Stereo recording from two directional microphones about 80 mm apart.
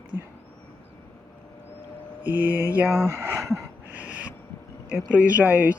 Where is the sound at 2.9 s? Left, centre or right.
Right.